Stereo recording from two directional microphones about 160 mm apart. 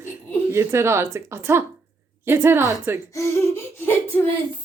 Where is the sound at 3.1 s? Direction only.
15° left (ahead or behind).